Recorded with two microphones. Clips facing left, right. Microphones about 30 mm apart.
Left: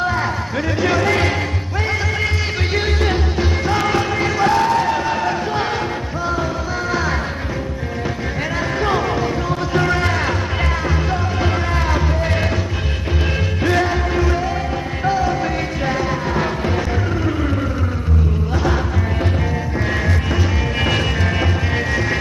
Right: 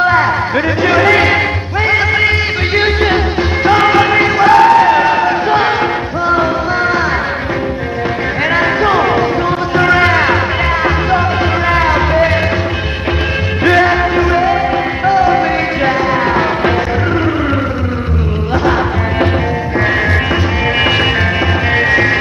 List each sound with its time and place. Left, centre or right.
0.0 s music: right
4.4 s a sound: right
8.8 s music: right
11.7 s music: right
13.7 s music: right